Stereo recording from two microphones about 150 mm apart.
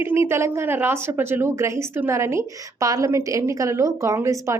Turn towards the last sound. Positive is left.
turn(degrees=-20)  # may be behind; listen again after turning